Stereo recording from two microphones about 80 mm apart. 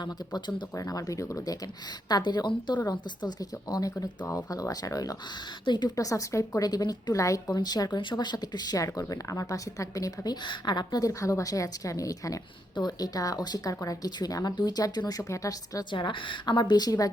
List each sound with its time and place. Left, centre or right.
0.0 s a woman's voice: left
0.8 s speech: left
2.0 s a woman's voice: left
5.6 s a woman's voice: left
6.0 s speech: left
10.4 s speech: left
12.7 s a woman's voice: left
15.2 s speech: left
15.8 s a woman's voice: left